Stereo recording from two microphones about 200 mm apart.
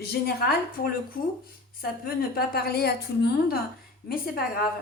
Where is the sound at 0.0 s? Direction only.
50° left (ahead or behind).